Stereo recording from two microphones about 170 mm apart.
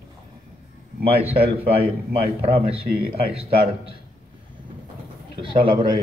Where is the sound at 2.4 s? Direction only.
35° right (ahead or behind).